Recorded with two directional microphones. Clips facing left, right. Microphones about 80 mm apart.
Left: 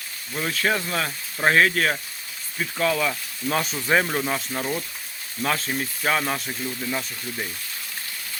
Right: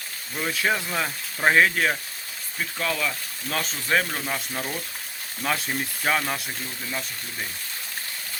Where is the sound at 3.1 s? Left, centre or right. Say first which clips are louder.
Left 5 dB; centre.